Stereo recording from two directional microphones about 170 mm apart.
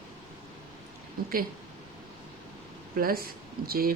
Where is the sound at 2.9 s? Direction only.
60° right (ahead or behind).